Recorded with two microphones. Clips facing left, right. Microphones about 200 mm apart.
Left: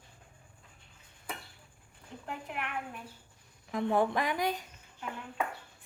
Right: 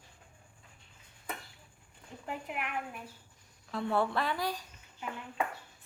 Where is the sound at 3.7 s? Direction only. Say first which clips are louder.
Left 2 dB; 15° left (ahead or behind).